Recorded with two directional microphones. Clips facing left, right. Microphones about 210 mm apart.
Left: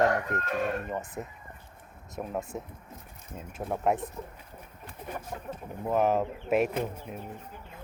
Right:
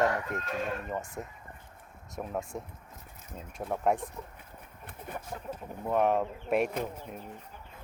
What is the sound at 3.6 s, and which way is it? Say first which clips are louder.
Speech: left 1 dB; centre (ahead or behind).